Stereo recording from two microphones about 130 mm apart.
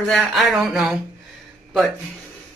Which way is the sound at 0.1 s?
Centre (ahead or behind).